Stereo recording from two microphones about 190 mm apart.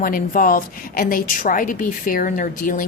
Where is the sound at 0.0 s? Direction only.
45° left (ahead or behind).